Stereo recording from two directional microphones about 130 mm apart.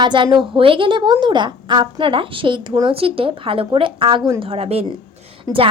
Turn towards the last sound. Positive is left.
turn(degrees=-30)  # may be behind; listen again after turning